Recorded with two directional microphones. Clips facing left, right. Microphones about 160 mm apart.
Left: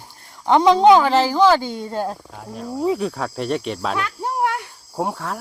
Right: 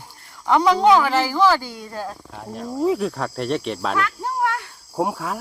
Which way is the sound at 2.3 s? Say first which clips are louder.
Even; centre (ahead or behind).